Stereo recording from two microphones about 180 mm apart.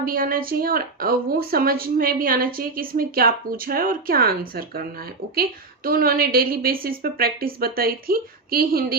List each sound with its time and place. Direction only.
0.0 s a woman's voice: 50° right (ahead or behind)